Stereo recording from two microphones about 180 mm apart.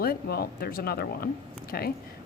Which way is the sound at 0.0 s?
60° left (ahead or behind).